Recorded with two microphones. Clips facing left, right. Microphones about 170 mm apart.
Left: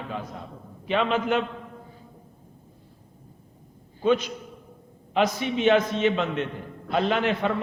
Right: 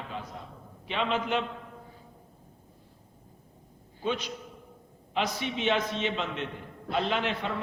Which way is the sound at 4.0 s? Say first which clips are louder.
Left 9 dB; 50° left (ahead or behind).